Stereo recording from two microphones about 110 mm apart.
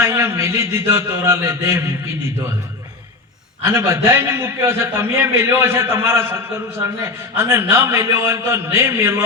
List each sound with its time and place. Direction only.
0.0 s a man's voice: 25° right (ahead or behind)
3.6 s a man's voice: 25° right (ahead or behind)